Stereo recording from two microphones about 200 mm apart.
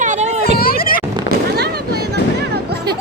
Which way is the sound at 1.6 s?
55° right (ahead or behind).